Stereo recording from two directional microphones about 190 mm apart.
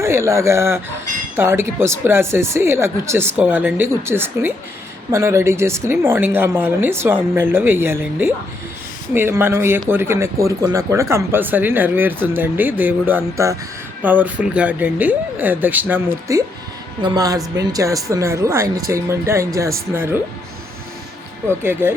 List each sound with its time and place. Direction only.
0.0 s speech: 15° right (ahead or behind)
21.6 s speech: 10° right (ahead or behind)